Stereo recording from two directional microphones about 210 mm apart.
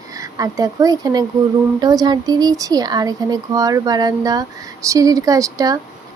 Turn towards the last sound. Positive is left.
turn(degrees=-15)  # may be behind; listen again after turning